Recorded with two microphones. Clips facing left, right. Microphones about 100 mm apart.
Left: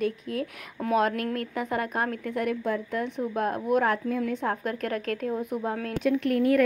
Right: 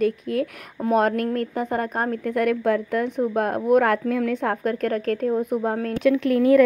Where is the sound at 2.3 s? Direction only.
60° right (ahead or behind).